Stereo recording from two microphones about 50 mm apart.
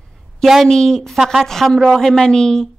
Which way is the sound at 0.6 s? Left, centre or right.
Centre.